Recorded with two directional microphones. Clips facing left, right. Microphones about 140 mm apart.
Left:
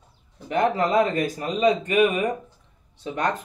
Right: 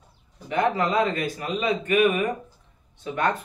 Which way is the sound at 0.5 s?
40° left (ahead or behind).